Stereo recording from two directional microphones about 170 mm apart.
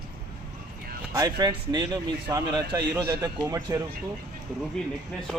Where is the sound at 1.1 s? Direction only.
20° right (ahead or behind).